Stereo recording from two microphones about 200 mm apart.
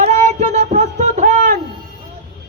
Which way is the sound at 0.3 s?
35° right (ahead or behind).